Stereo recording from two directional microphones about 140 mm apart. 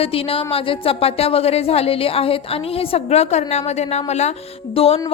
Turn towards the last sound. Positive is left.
turn(degrees=45)  # may be behind; listen again after turning